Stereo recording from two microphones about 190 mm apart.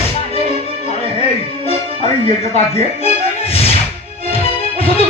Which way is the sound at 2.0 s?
30° right (ahead or behind).